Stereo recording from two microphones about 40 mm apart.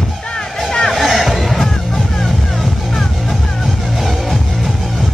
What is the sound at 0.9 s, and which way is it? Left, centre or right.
Music, centre.